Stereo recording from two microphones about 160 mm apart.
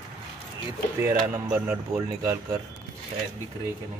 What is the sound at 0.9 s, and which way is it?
Speech, 15° right (ahead or behind).